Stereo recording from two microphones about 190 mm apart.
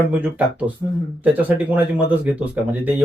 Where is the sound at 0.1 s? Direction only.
10° right (ahead or behind).